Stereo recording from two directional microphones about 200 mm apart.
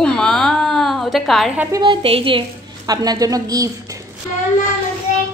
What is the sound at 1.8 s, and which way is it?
A woman's voice, 25° right (ahead or behind).